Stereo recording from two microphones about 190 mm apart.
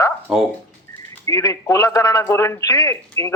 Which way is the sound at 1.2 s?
15° left (ahead or behind).